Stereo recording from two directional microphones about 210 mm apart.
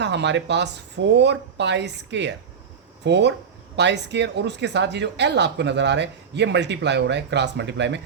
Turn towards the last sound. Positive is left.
turn(degrees=-55)  # may be behind; listen again after turning